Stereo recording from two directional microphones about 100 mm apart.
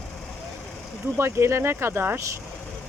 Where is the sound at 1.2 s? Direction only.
25° right (ahead or behind).